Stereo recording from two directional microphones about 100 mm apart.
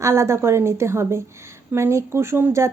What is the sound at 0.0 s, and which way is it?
A woman's voice, 30° right (ahead or behind).